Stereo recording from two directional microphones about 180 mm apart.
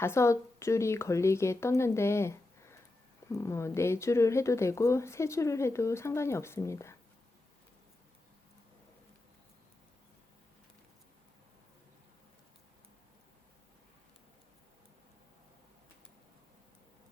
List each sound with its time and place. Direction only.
0.0 s speech: 15° left (ahead or behind)